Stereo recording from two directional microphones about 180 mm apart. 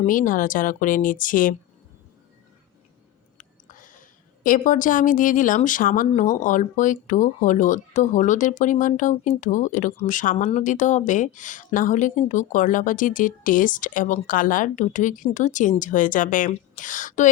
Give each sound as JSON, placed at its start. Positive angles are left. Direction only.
{"t": 0.0, "sound": "speech", "side_deg": 50}
{"t": 3.3, "sound": "a sound", "side_deg": 45}
{"t": 4.4, "sound": "speech", "side_deg": 45}